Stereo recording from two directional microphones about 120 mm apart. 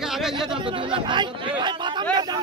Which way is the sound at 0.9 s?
40° right (ahead or behind).